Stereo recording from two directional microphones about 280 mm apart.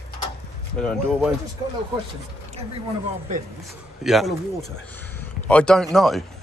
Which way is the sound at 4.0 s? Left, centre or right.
Centre.